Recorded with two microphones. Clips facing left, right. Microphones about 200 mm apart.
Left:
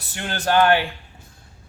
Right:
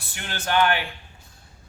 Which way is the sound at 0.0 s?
40° left (ahead or behind).